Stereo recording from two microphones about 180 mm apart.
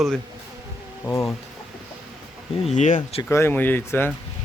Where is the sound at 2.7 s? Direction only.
45° left (ahead or behind).